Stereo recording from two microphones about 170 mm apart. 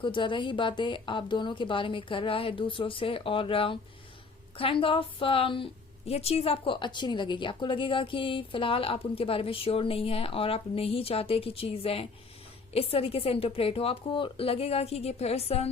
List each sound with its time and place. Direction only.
0.0 s a woman's voice: 30° left (ahead or behind)